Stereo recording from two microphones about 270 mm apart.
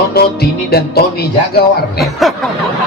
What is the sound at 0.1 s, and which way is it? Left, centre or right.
Speech, left.